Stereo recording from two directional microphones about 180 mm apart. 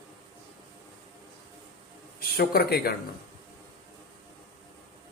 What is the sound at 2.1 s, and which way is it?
Speech, 60° left (ahead or behind).